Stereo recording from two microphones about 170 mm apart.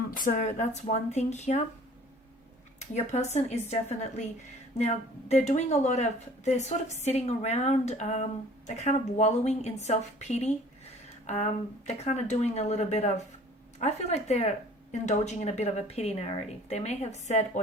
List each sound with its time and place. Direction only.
0.3 s speech: 50° left (ahead or behind)
2.7 s speech: 40° left (ahead or behind)
11.9 s speech: 40° left (ahead or behind)